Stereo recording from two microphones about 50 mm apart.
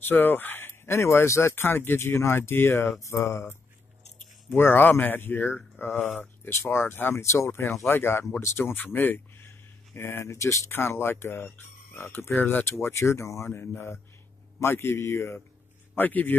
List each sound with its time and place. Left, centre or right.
0.0 s speech: left
0.8 s speech: left
1.5 s speech: left
2.1 s speech: left
3.1 s speech: left
4.6 s speech: left
5.9 s speech: left
6.4 s speech: left
7.2 s speech: left
8.8 s speech: left
10.9 s speech: left
13.5 s speech: left
16.0 s speech: left